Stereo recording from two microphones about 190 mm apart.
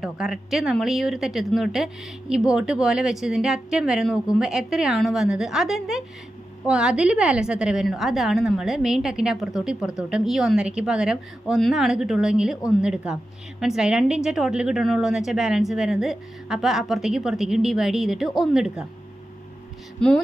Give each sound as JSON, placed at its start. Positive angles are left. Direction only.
{"t": 0.0, "sound": "a woman's voice", "side_deg": 0}
{"t": 20.0, "sound": "a woman's voice", "side_deg": 5}